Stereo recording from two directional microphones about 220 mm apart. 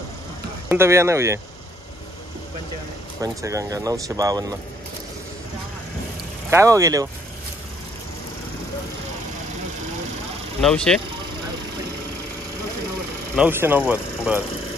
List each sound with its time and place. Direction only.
0.7 s speech: 10° right (ahead or behind)
3.2 s speech: 15° right (ahead or behind)
6.5 s speech: 15° right (ahead or behind)
10.6 s speech: 5° left (ahead or behind)
13.4 s speech: 10° right (ahead or behind)